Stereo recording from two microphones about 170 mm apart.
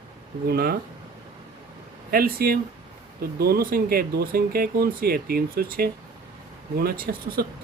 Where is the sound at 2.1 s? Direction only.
60° right (ahead or behind).